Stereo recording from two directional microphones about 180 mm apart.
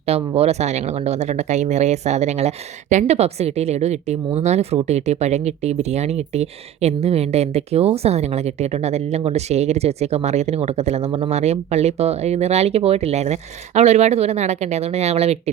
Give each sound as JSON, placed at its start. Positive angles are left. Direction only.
{"t": 0.0, "sound": "speech", "side_deg": -35}